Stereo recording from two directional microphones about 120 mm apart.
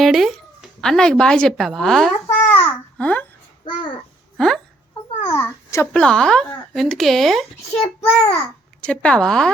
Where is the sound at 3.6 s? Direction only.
45° left (ahead or behind).